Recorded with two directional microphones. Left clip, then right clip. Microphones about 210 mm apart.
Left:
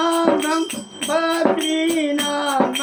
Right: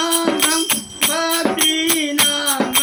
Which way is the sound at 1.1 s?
20° right (ahead or behind).